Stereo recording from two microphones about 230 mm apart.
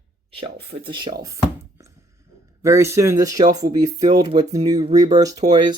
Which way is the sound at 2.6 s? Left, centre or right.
Centre.